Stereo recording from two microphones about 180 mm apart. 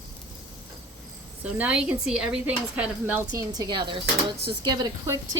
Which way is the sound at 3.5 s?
25° right (ahead or behind).